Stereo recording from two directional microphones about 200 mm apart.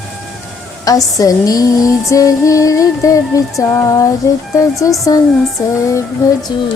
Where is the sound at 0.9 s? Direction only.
15° left (ahead or behind).